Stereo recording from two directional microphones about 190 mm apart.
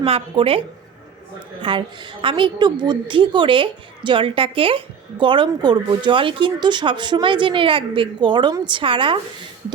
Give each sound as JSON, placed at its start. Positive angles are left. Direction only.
{"t": 0.0, "sound": "a woman's voice", "side_deg": -30}
{"t": 1.6, "sound": "a woman's voice", "side_deg": -25}